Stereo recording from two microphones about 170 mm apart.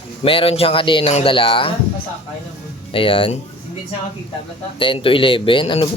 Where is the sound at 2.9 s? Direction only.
30° left (ahead or behind).